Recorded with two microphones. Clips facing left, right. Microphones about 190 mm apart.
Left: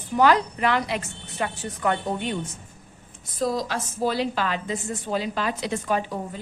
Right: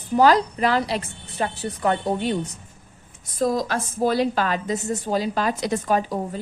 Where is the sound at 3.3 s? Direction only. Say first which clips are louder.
Right 3 dB; 50° right (ahead or behind).